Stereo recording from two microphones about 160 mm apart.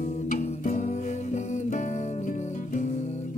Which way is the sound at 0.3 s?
50° left (ahead or behind).